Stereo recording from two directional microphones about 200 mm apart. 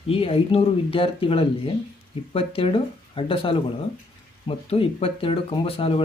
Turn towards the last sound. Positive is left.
turn(degrees=30)  # may be behind; listen again after turning